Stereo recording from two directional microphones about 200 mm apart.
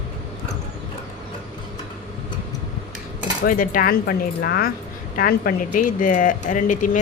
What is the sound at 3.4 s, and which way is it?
Speech, 45° left (ahead or behind).